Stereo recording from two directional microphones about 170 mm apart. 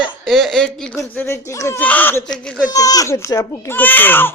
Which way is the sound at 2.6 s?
20° left (ahead or behind).